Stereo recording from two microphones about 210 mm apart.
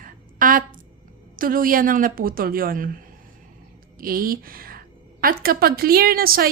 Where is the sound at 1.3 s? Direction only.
40° right (ahead or behind).